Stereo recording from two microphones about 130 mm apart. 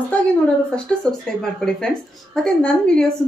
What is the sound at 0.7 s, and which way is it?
A woman's voice, 5° left (ahead or behind).